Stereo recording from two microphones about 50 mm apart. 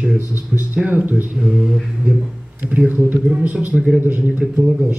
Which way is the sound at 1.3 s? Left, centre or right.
Centre.